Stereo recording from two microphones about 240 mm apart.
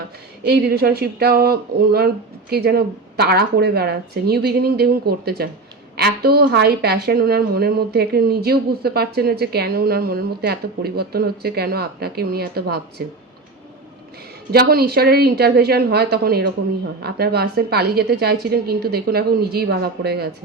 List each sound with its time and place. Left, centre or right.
0.4 s a woman's voice: right
14.5 s a woman's voice: right